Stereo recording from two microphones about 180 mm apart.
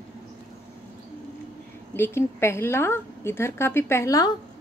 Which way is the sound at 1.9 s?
15° left (ahead or behind).